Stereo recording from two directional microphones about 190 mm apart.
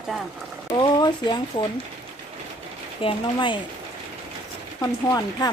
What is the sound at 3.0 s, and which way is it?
Speech, 25° left (ahead or behind).